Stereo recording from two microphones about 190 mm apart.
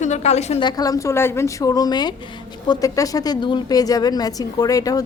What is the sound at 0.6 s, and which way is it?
A woman's voice, 20° left (ahead or behind).